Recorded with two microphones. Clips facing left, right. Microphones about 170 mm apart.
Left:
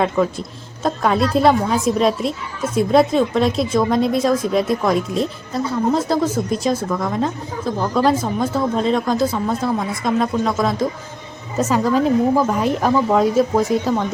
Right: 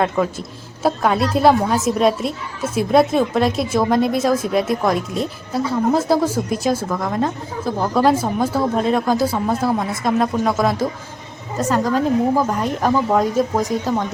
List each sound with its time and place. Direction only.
0.0 s a woman's voice: 5° right (ahead or behind)